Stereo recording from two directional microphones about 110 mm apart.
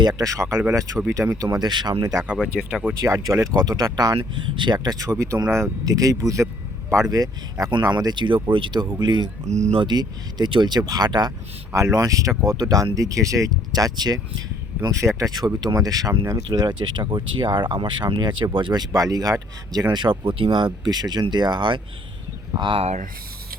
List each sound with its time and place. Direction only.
0.0 s speech: 35° right (ahead or behind)
1.5 s speech: 40° right (ahead or behind)
2.2 s speech: 10° right (ahead or behind)
3.0 s speech: 30° right (ahead or behind)
4.2 s speech: 45° right (ahead or behind)
9.5 s speech: 90° right
9.7 s speech: 40° right (ahead or behind)
15.2 s speech: 35° right (ahead or behind)
18.9 s speech: 30° right (ahead or behind)
19.9 s speech: 45° right (ahead or behind)